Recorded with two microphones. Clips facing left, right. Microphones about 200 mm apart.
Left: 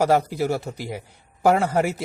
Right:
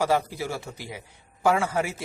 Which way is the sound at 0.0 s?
45° left (ahead or behind).